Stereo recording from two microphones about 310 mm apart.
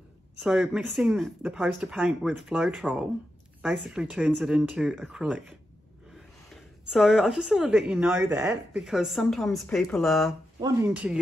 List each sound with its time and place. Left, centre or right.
0.4 s a woman's voice: centre
6.5 s a woman's voice: centre